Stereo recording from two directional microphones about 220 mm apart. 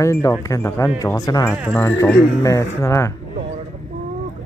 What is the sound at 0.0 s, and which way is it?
A man's voice, 15° left (ahead or behind).